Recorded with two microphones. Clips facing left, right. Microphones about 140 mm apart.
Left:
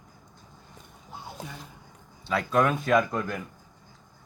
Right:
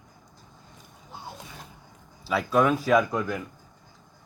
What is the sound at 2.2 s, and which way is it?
Speech, 5° right (ahead or behind).